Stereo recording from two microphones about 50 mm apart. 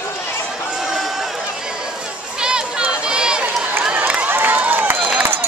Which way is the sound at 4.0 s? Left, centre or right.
Right.